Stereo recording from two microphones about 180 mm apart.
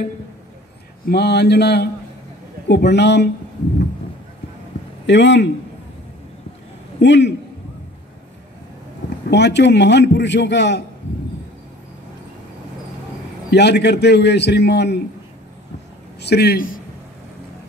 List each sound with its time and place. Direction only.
1.0 s mantra: 65° left (ahead or behind)
2.7 s a man's voice: 70° left (ahead or behind)
5.0 s speech: 80° left
7.0 s a man's voice: 80° left
9.3 s a man's voice: 70° left (ahead or behind)
13.5 s a man's voice: 70° left (ahead or behind)
16.2 s a man's voice: 65° left (ahead or behind)